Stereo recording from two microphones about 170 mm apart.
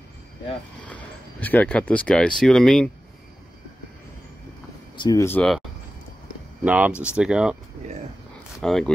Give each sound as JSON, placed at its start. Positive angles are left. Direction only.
{"t": 0.8, "sound": "speech", "side_deg": 10}
{"t": 4.9, "sound": "speech", "side_deg": 20}
{"t": 6.6, "sound": "speech", "side_deg": -10}
{"t": 8.5, "sound": "speech", "side_deg": 0}